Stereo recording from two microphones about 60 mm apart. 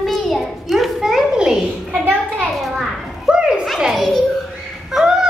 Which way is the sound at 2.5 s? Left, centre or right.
Centre.